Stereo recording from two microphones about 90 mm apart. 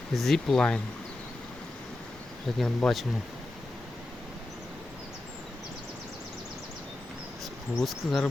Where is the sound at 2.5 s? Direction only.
Centre (ahead or behind).